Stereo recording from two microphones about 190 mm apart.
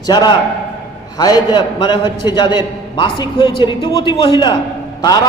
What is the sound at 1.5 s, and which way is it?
A man's voice, 25° left (ahead or behind).